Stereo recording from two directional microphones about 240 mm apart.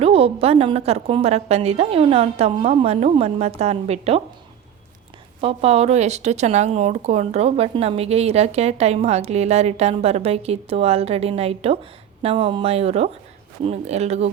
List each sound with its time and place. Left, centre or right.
0.0 s speech: right
5.4 s speech: right